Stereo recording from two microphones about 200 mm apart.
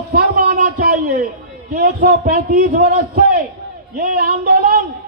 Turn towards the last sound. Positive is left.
turn(degrees=-50)  # may be behind; listen again after turning